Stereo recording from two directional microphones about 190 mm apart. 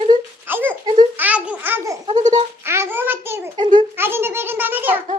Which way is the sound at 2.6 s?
10° right (ahead or behind).